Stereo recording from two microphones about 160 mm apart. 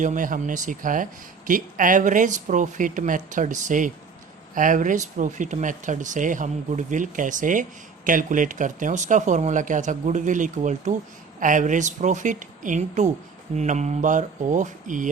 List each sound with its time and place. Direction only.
0.0 s speech: 55° right (ahead or behind)